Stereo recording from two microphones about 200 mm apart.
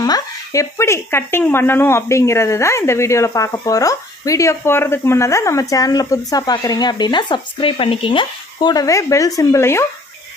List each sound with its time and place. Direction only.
0.0 s speech: 15° left (ahead or behind)